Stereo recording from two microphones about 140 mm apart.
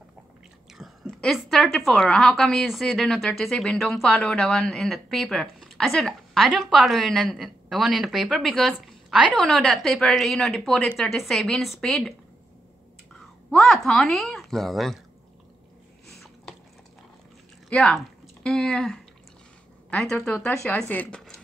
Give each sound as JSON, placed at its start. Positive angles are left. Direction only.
{"t": 0.7, "sound": "a woman's voice", "side_deg": 0}
{"t": 13.5, "sound": "a woman's voice", "side_deg": 0}
{"t": 16.1, "sound": "a sound", "side_deg": 0}
{"t": 17.6, "sound": "a woman's voice", "side_deg": 5}
{"t": 20.3, "sound": "speech", "side_deg": 15}